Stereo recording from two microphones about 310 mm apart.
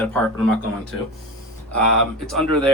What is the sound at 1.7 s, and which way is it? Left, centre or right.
Speech, centre.